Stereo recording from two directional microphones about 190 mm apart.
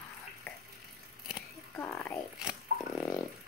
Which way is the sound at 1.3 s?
10° left (ahead or behind).